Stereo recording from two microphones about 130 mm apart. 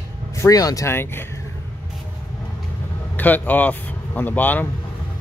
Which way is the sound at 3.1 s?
15° left (ahead or behind).